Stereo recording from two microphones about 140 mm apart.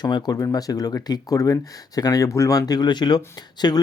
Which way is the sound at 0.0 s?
30° left (ahead or behind).